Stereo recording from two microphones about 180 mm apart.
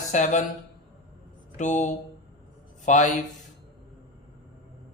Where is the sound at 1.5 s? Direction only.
40° left (ahead or behind).